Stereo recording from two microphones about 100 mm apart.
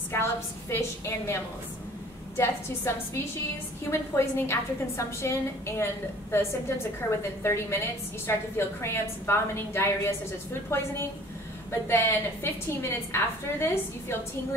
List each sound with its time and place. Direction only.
0.1 s a woman's voice: 25° left (ahead or behind)
3.9 s a woman's voice: 25° left (ahead or behind)
7.0 s a woman's voice: 25° left (ahead or behind)